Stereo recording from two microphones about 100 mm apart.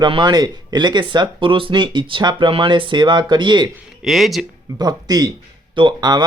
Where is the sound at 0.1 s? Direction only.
45° right (ahead or behind).